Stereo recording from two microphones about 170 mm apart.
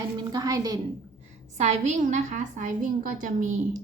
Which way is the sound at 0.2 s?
25° right (ahead or behind).